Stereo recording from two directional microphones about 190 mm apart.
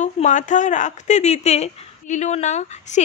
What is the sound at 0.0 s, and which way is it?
Speech, 40° left (ahead or behind).